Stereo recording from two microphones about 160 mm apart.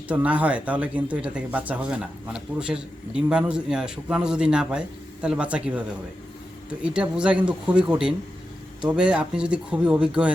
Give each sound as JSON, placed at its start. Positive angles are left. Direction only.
{"t": 0.1, "sound": "speech", "side_deg": -10}
{"t": 6.8, "sound": "speech", "side_deg": -5}